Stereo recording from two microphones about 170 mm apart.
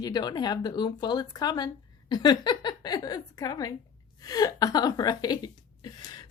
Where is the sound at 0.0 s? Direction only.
25° left (ahead or behind).